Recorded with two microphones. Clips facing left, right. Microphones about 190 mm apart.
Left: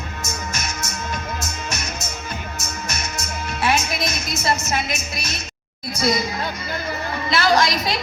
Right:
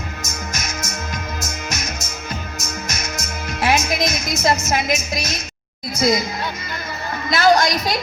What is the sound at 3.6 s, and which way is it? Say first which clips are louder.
Music: right 3 dB; 40° right (ahead or behind).